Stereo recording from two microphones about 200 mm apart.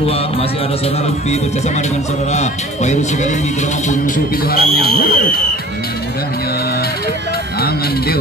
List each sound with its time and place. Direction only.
0.0 s speech: 30° left (ahead or behind)
2.3 s speech: 35° left (ahead or behind)